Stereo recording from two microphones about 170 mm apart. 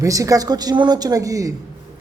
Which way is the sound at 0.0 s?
20° right (ahead or behind).